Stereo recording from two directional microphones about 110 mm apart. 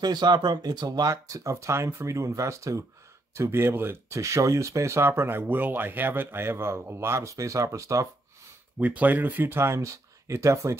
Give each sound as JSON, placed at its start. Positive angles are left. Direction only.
{"t": 0.0, "sound": "speech", "side_deg": -40}
{"t": 8.7, "sound": "speech", "side_deg": -15}